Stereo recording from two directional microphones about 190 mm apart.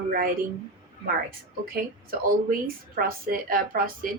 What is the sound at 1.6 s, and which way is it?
A woman's voice, 50° right (ahead or behind).